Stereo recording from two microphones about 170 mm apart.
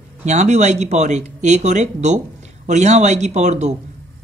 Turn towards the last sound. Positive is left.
turn(degrees=-45)  # may be behind; listen again after turning